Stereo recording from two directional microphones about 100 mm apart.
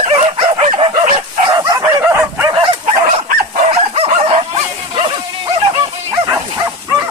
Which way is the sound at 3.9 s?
75° right (ahead or behind).